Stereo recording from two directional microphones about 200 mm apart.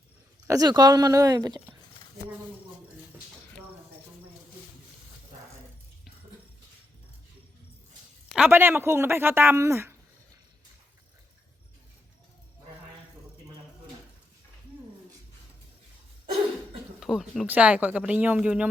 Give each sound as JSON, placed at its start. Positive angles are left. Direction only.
{"t": 0.4, "sound": "speech", "side_deg": -15}
{"t": 8.3, "sound": "speech", "side_deg": -5}
{"t": 17.0, "sound": "speech", "side_deg": 0}